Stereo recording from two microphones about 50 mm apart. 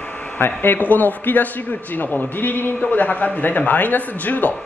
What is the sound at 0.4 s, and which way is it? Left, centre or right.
A man's voice, left.